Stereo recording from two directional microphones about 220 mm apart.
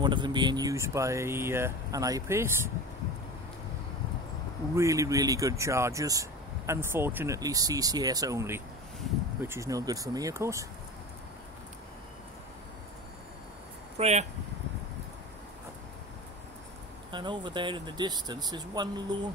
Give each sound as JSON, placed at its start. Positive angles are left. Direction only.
{"t": 0.0, "sound": "speech", "side_deg": -20}
{"t": 4.7, "sound": "speech", "side_deg": -15}
{"t": 13.9, "sound": "speech", "side_deg": -30}
{"t": 17.1, "sound": "speech", "side_deg": -20}